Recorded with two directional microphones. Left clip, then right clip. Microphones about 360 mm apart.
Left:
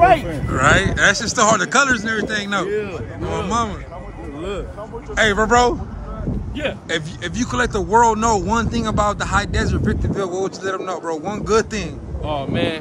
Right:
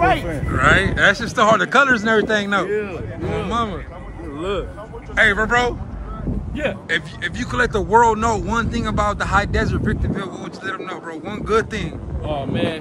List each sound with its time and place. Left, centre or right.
0.0 s a sound: left
0.3 s speech: centre
4.4 s speech: centre
5.1 s speech: centre
6.5 s speech: centre
6.9 s speech: centre